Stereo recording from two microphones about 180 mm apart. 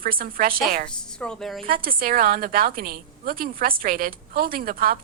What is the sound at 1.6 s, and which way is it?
A woman's voice, 55° right (ahead or behind).